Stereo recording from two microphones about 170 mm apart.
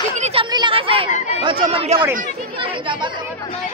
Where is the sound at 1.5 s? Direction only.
30° right (ahead or behind).